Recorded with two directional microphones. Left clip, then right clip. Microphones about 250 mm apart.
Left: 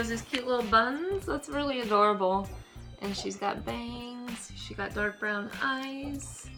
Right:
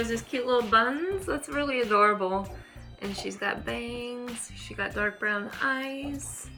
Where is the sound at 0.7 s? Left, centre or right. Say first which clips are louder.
Right 2 dB; centre.